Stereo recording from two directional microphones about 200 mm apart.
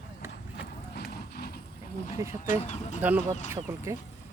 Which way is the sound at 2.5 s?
35° left (ahead or behind).